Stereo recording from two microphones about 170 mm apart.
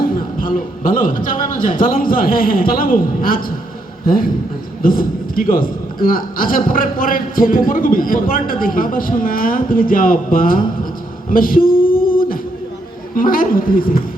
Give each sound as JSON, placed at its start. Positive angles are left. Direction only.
{"t": 0.0, "sound": "a man's voice", "side_deg": 55}
{"t": 13.1, "sound": "a man's voice", "side_deg": 55}